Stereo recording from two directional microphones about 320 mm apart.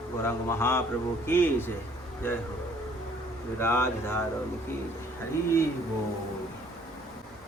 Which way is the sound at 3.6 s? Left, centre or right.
Centre.